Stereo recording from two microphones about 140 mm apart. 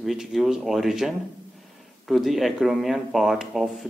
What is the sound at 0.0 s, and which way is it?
Speech, centre (ahead or behind).